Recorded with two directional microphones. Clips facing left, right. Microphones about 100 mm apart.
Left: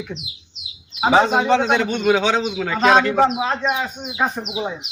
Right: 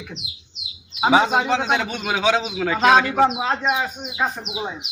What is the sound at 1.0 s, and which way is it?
A man's voice, 5° right (ahead or behind).